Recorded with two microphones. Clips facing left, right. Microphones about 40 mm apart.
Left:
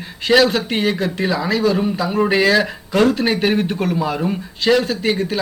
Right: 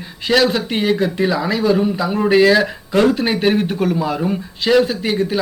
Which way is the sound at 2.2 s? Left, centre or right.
Centre.